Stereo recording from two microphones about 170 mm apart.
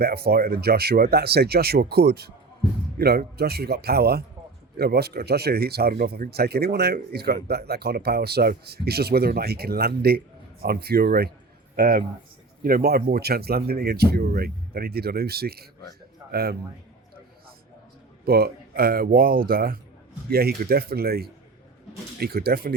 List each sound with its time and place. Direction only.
0.0 s speech: 70° right (ahead or behind)
18.3 s speech: 65° right (ahead or behind)